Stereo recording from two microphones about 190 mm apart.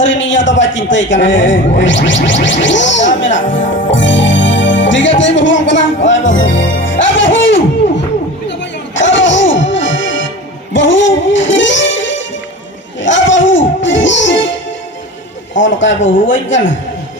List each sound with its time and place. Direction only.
0.0 s a man's voice: 75° left (ahead or behind)
3.9 s music: 75° left (ahead or behind)
9.0 s music: 75° left (ahead or behind)
15.5 s speech: 75° left (ahead or behind)